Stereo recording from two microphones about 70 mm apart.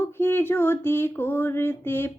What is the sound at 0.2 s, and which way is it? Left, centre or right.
Child singing, left.